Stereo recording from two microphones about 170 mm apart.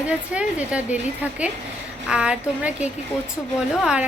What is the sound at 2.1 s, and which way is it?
Speech, 5° right (ahead or behind).